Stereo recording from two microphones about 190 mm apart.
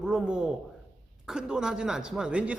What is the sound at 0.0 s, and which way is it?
A man's voice, 5° right (ahead or behind).